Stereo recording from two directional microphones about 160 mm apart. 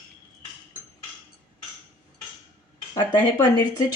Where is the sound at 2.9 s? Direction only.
25° left (ahead or behind).